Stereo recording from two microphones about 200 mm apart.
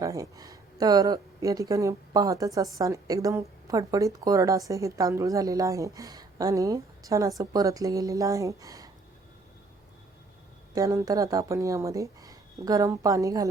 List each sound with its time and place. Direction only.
0.0 s a woman's voice: 15° right (ahead or behind)
10.8 s a woman's voice: 15° right (ahead or behind)